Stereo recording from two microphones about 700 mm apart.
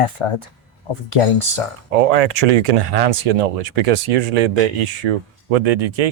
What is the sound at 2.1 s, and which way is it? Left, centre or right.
Speech, right.